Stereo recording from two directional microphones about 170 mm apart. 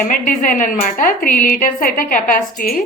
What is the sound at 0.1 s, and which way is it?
A woman's voice, 50° left (ahead or behind).